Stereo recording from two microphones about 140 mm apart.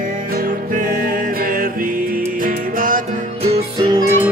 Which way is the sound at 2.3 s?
75° right (ahead or behind).